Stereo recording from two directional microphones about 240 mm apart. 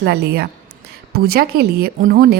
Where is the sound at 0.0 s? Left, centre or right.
Right.